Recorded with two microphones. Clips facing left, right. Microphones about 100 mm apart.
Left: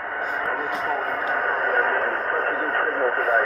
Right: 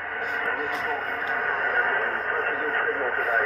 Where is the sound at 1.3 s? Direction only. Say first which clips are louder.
Left 3 dB; 35° left (ahead or behind).